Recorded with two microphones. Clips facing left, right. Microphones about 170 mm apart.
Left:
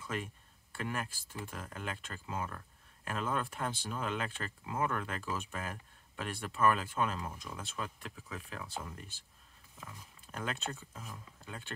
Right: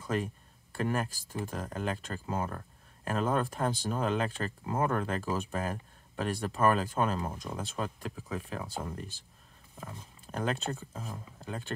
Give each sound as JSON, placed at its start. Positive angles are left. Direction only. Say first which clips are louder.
{"t": 0.0, "sound": "speech", "louder": "right 7 dB", "side_deg": -40}
{"t": 10.2, "sound": "speech", "louder": "right 7 dB", "side_deg": -40}